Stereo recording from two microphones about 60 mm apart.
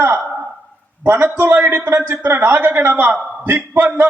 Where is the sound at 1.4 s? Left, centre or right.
Right.